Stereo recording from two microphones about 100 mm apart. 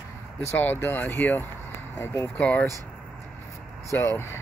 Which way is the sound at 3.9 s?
25° left (ahead or behind).